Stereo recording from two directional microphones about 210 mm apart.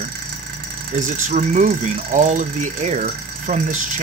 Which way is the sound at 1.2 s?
35° right (ahead or behind).